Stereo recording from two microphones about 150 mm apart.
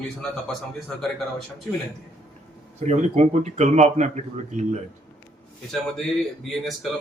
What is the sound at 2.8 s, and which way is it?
Speech, 50° right (ahead or behind).